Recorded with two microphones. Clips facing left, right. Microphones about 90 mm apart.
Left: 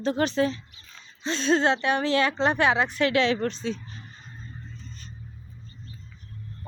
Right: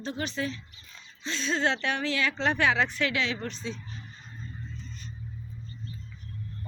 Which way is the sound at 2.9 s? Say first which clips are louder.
Left 7 dB; 40° left (ahead or behind).